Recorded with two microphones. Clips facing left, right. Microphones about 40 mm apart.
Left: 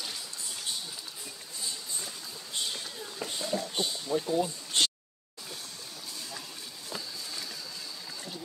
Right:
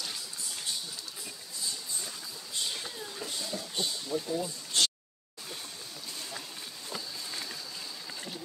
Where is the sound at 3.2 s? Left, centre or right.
Left.